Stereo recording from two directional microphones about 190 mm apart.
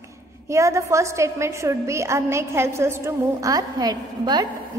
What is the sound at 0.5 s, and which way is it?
A woman's voice, 15° right (ahead or behind).